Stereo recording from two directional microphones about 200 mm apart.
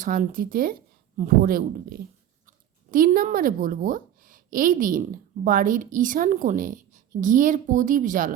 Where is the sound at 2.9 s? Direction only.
45° right (ahead or behind).